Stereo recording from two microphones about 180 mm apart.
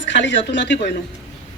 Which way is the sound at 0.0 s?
80° left.